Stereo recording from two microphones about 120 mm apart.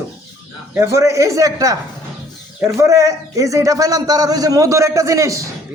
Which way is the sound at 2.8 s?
25° right (ahead or behind).